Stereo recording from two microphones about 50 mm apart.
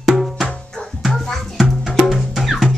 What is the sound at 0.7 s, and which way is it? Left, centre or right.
Music, centre.